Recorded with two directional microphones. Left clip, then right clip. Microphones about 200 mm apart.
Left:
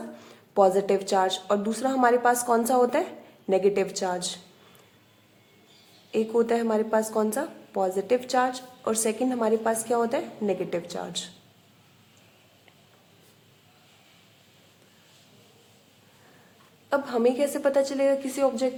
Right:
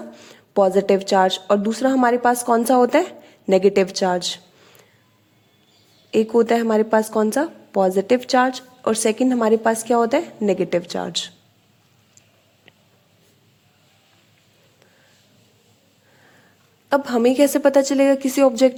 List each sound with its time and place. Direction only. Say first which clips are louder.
0.2 s a woman's voice: right 3 dB; 35° right (ahead or behind)
6.1 s a woman's voice: right 7 dB; 35° right (ahead or behind)
16.9 s a woman's voice: right 6 dB; 40° right (ahead or behind)